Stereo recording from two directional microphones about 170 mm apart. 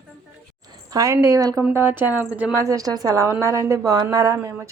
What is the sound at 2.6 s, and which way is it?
A woman's voice, 20° right (ahead or behind).